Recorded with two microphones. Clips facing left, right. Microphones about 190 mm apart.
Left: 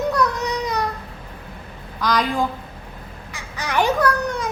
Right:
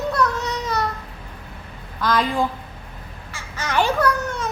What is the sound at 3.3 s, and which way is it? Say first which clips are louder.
A child's voice: even; 15° left (ahead or behind).